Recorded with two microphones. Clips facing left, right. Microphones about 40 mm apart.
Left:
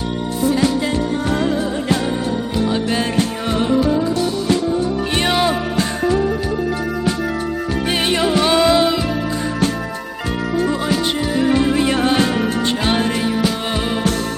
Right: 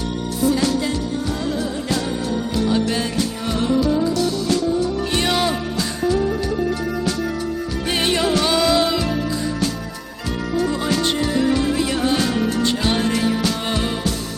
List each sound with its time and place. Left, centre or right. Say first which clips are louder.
3.2 s music: left 3 dB; left
5.1 s music: left 3 dB; left
8.0 s music: left 2 dB; centre
10.7 s music: left 2 dB; centre
11.5 s music: left 4 dB; left